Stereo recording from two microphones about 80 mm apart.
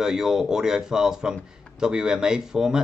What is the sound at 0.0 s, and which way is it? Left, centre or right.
Speech, centre.